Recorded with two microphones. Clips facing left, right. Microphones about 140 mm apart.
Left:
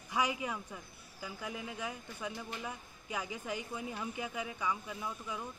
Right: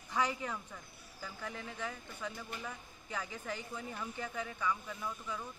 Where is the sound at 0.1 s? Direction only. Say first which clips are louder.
Left 1 dB; 15° left (ahead or behind).